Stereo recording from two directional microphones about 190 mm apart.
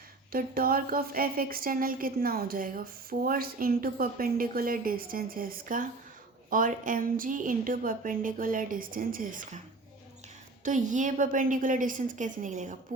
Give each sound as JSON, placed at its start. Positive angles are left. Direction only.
{"t": 0.3, "sound": "speech", "side_deg": -50}
{"t": 10.6, "sound": "speech", "side_deg": -40}